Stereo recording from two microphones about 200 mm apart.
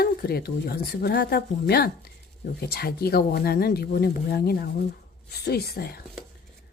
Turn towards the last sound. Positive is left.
turn(degrees=50)  # may be behind; listen again after turning